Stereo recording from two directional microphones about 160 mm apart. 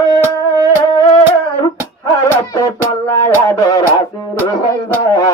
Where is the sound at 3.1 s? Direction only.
20° left (ahead or behind).